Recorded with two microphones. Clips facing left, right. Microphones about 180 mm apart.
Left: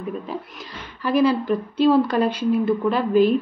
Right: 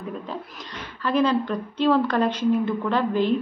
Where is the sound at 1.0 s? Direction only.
10° left (ahead or behind).